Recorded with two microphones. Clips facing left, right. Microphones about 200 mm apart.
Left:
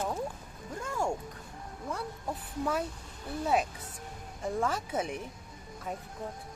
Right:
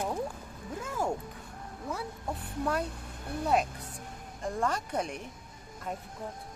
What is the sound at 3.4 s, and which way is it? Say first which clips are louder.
Speech: right 1 dB; centre (ahead or behind).